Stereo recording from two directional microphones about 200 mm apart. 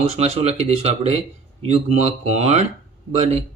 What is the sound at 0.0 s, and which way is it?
Speech, 30° right (ahead or behind).